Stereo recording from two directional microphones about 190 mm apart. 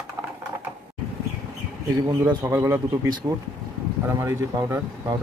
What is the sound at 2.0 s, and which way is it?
Speech, 20° right (ahead or behind).